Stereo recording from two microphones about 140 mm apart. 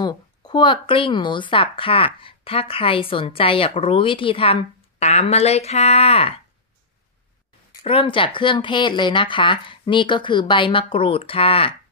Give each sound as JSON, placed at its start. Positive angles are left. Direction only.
{"t": 0.0, "sound": "a woman's voice", "side_deg": 30}
{"t": 7.8, "sound": "a woman's voice", "side_deg": 40}